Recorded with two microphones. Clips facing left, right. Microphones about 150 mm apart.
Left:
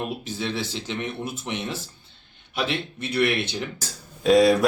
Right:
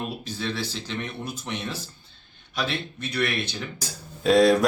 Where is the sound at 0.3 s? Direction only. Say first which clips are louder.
Left 1 dB; 20° left (ahead or behind).